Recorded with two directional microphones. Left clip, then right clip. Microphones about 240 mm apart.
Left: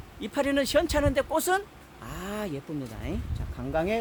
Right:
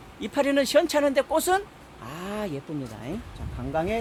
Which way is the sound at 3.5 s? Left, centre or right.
Left.